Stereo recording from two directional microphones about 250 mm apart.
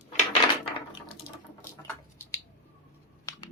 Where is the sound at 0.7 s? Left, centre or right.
Left.